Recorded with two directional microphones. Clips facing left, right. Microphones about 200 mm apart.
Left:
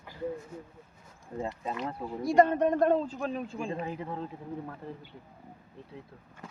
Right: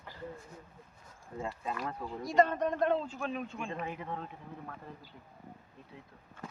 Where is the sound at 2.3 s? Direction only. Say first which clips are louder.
Left 5 dB; 55° left (ahead or behind); by 4.3 s 35° left (ahead or behind).